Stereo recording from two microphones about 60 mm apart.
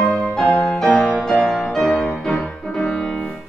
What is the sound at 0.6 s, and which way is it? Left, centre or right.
Music, centre.